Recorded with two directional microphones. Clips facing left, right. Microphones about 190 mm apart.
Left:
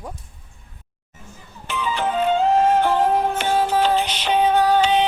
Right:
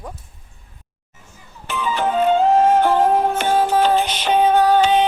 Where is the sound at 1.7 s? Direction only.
50° right (ahead or behind).